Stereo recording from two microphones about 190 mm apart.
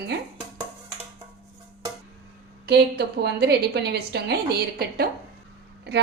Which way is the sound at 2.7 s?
60° right (ahead or behind).